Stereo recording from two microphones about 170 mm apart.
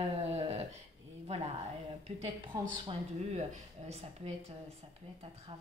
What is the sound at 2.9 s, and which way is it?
A woman's voice, 40° right (ahead or behind).